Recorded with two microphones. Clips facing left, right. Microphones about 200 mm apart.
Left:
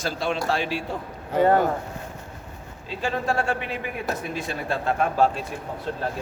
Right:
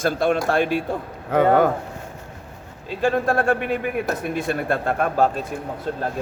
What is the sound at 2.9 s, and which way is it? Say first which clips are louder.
A man's voice: right 6 dB; 55° right (ahead or behind).